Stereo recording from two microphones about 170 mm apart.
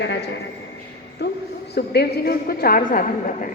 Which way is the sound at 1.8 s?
70° left (ahead or behind).